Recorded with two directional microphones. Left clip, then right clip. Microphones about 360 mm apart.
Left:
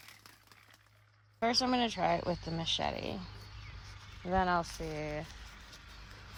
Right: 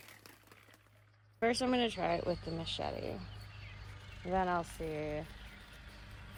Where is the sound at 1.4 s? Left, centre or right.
Centre.